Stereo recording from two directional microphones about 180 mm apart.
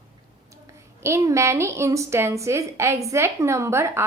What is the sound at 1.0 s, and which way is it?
A woman's voice, 15° right (ahead or behind).